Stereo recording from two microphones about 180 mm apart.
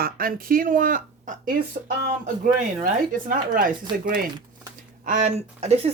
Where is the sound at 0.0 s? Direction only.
55° right (ahead or behind).